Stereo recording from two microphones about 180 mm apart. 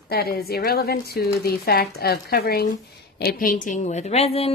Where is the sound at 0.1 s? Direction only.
60° left (ahead or behind).